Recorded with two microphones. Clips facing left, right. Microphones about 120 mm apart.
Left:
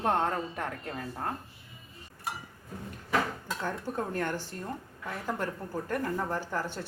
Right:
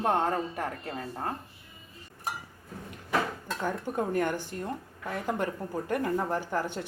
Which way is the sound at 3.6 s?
15° right (ahead or behind).